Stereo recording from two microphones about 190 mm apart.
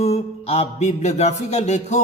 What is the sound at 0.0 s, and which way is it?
Speech, 30° left (ahead or behind).